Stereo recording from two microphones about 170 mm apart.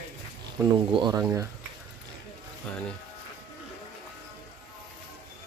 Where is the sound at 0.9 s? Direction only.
25° right (ahead or behind).